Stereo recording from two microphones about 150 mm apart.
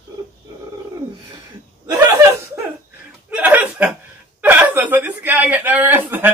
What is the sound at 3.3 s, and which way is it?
Chuckle, 10° right (ahead or behind).